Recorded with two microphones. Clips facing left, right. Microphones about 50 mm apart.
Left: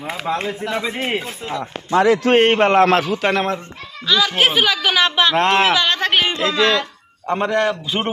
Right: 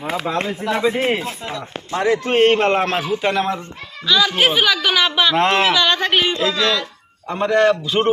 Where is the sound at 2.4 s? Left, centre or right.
Left.